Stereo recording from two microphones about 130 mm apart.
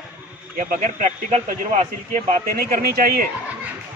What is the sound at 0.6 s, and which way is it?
A man's voice, 85° right.